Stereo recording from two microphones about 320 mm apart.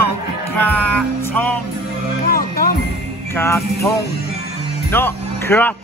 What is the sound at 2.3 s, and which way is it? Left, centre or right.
Music, left.